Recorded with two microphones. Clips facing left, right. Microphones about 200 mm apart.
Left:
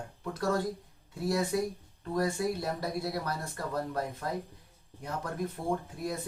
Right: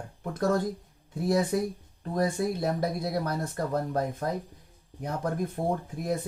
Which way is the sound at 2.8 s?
45° right (ahead or behind).